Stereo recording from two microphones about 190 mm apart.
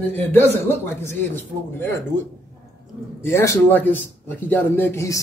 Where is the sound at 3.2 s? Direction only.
15° left (ahead or behind).